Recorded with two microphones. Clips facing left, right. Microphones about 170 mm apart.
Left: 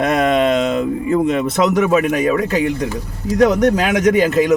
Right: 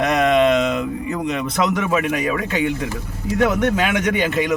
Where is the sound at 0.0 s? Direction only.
50° left (ahead or behind).